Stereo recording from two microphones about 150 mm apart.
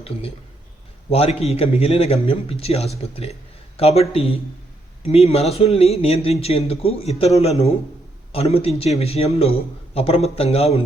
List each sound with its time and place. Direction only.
0.0 s a man's voice: 40° left (ahead or behind)